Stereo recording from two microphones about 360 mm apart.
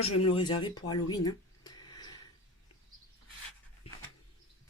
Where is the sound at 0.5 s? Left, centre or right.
Left.